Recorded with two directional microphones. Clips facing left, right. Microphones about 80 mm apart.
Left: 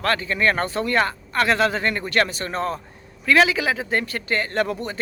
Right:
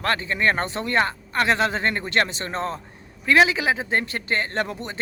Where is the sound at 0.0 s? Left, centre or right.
Right.